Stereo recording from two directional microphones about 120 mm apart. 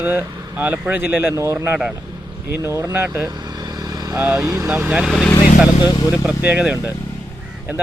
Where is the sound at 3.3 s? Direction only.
35° right (ahead or behind).